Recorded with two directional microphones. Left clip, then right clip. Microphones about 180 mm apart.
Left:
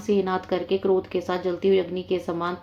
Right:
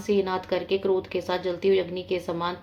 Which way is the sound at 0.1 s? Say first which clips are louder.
Left 1 dB; 35° left (ahead or behind).